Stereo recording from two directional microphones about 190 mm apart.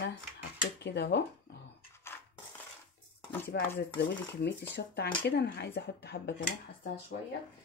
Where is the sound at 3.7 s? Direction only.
60° left (ahead or behind).